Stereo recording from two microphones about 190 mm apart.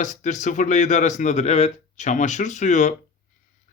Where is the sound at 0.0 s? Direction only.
40° left (ahead or behind).